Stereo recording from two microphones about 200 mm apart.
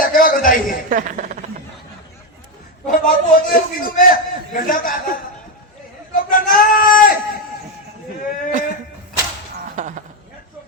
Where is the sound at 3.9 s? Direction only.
45° left (ahead or behind).